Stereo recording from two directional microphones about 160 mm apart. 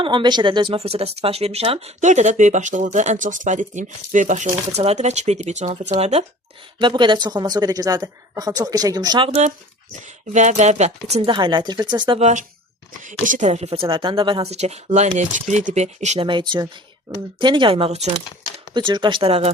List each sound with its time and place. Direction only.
0.0 s speech: 30° right (ahead or behind)
6.7 s speech: 30° right (ahead or behind)
10.3 s speech: 45° right (ahead or behind)
11.3 s speech: 30° right (ahead or behind)
12.2 s speech: 50° right (ahead or behind)
16.2 s speech: 30° right (ahead or behind)